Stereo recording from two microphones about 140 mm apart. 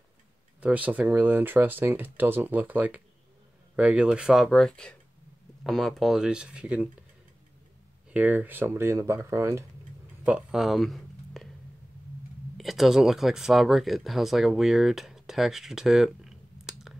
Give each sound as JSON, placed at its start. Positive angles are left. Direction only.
{"t": 0.6, "sound": "speech", "side_deg": -10}
{"t": 8.1, "sound": "speech", "side_deg": -10}
{"t": 10.2, "sound": "speech", "side_deg": -5}
{"t": 12.5, "sound": "speech", "side_deg": 0}